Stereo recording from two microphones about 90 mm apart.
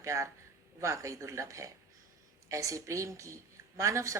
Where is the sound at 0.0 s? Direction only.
35° right (ahead or behind).